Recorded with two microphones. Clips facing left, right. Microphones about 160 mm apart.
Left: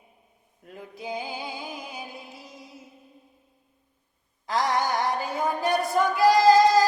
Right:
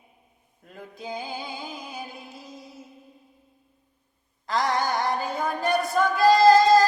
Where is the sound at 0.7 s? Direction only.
15° left (ahead or behind).